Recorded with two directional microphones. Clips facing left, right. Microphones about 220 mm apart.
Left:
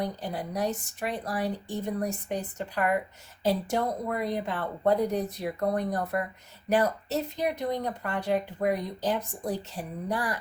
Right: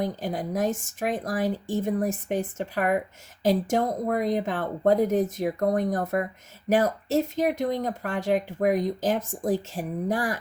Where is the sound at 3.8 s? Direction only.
45° right (ahead or behind).